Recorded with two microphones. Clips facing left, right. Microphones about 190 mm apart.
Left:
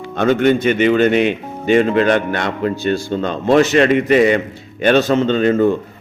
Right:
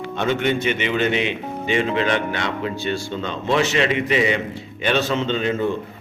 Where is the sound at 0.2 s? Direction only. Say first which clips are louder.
Left 8 dB; 45° left (ahead or behind).